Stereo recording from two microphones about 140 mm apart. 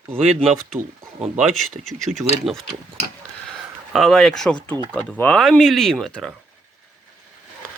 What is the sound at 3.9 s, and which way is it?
Speech, centre (ahead or behind).